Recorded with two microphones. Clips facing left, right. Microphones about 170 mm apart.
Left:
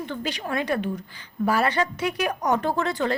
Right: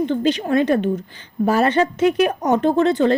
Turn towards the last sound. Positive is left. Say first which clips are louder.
# right 9 dB
turn(degrees=-25)  # may be behind; listen again after turning